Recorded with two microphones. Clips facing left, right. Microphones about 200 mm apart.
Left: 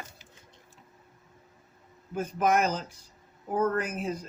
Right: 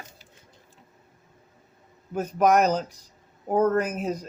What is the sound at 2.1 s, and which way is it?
Speech, 40° right (ahead or behind).